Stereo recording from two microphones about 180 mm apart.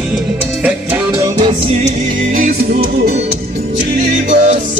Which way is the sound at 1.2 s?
25° right (ahead or behind).